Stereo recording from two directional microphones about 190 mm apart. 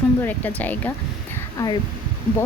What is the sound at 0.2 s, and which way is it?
Speech, 10° left (ahead or behind).